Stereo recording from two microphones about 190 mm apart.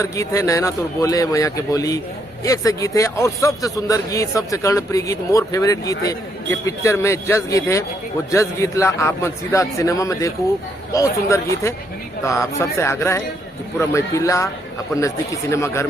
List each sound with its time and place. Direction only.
0.0 s a man's voice: 15° left (ahead or behind)